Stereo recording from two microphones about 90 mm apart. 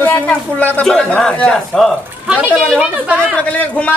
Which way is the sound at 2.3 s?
20° right (ahead or behind).